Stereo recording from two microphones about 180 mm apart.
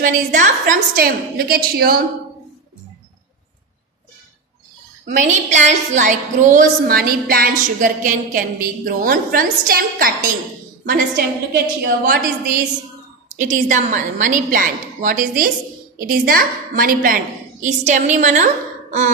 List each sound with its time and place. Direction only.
0.0 s a woman's voice: 45° right (ahead or behind)
5.0 s a woman's voice: 40° right (ahead or behind)
13.3 s a woman's voice: 40° right (ahead or behind)